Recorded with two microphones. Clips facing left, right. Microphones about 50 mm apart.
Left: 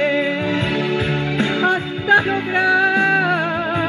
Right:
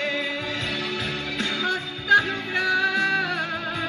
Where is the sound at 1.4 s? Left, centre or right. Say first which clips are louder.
Left 8 dB; left.